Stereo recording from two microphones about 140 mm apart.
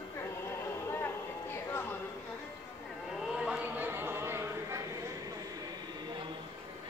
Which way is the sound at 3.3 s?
5° right (ahead or behind).